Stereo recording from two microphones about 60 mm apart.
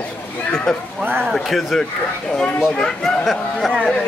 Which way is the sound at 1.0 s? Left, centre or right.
Right.